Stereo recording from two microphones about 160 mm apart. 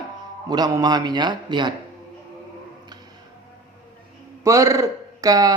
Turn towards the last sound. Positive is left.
turn(degrees=-20)  # may be behind; listen again after turning